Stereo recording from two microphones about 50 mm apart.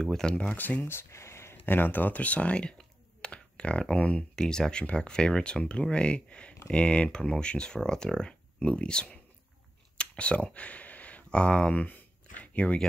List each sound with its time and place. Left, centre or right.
0.0 s speech: centre
0.8 s a sound: left
1.7 s speech: left
3.2 s computer keyboard: left
3.9 s speech: left
4.4 s speech: centre
9.9 s a sound: left